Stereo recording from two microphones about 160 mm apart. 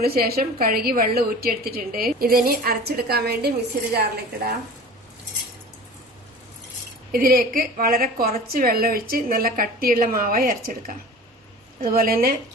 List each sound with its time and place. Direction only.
0.0 s a woman's voice: 75° right (ahead or behind)
7.1 s a woman's voice: 65° right (ahead or behind)